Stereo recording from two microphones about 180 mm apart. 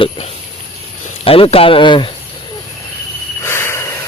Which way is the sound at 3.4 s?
15° left (ahead or behind).